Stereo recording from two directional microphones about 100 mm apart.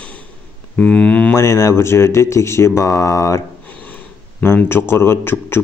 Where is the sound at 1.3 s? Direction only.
30° left (ahead or behind).